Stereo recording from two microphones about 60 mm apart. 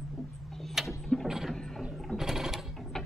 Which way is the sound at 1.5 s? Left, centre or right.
Centre.